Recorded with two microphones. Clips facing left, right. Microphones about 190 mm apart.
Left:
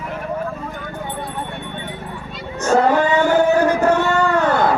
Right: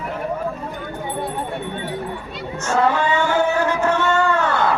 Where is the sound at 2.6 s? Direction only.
40° left (ahead or behind).